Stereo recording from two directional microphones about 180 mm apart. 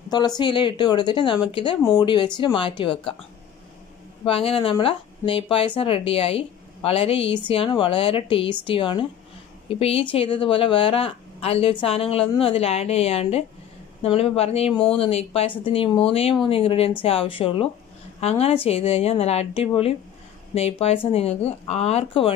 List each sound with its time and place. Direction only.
0.1 s speech: 25° left (ahead or behind)
4.2 s a woman's voice: 30° left (ahead or behind)